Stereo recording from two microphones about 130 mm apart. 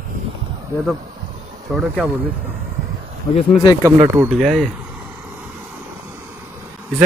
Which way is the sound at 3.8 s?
20° right (ahead or behind).